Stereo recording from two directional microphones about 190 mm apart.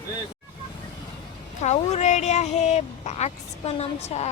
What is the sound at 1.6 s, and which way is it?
Speech, 35° left (ahead or behind).